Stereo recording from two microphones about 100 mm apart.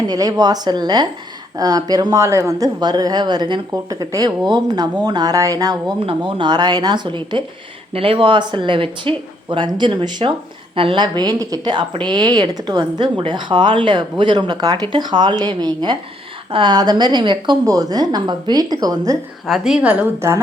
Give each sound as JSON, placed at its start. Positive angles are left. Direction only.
{"t": 0.1, "sound": "a woman's voice", "side_deg": -40}
{"t": 2.8, "sound": "a woman's voice", "side_deg": -45}
{"t": 6.1, "sound": "a woman's voice", "side_deg": -55}
{"t": 7.9, "sound": "speech", "side_deg": -70}
{"t": 10.8, "sound": "a woman's voice", "side_deg": -65}
{"t": 11.0, "sound": "a woman's voice", "side_deg": -45}
{"t": 17.7, "sound": "a woman's voice", "side_deg": -40}
{"t": 19.5, "sound": "a woman's voice", "side_deg": -5}